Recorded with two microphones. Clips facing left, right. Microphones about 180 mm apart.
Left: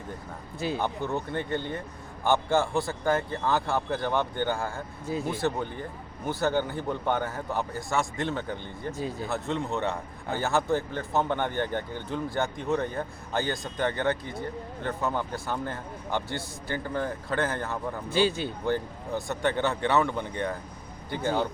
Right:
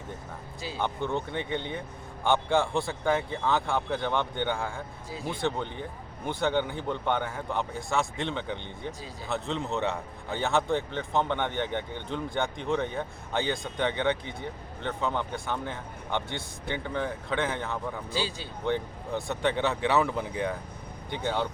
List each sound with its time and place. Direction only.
0.8 s a man's voice: 5° left (ahead or behind)
5.0 s speech: 55° left (ahead or behind)
5.3 s a man's voice: 5° left (ahead or behind)
18.1 s speech: 55° left (ahead or behind)
18.6 s a man's voice: centre (ahead or behind)